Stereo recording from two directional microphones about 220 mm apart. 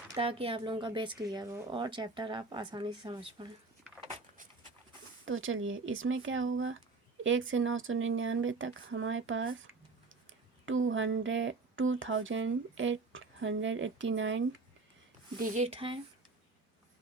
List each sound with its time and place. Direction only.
0.2 s speech: 25° right (ahead or behind)
4.0 s a sound: 25° right (ahead or behind)
5.2 s speech: 65° right (ahead or behind)
15.4 s speech: 35° right (ahead or behind)